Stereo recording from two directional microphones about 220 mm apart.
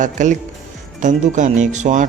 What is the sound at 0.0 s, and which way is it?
Speech, 35° right (ahead or behind).